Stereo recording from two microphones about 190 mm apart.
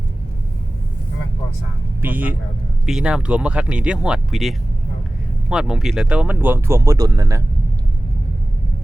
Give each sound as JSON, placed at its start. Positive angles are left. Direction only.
{"t": 2.0, "sound": "speech", "side_deg": -10}